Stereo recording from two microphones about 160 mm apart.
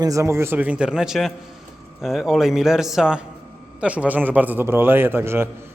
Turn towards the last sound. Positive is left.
turn(degrees=-15)  # may be behind; listen again after turning